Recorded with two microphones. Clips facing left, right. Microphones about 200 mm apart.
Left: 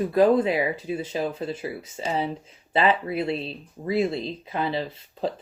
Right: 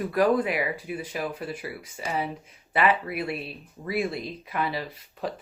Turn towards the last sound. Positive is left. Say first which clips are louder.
# left 4 dB
turn(degrees=25)  # may be behind; listen again after turning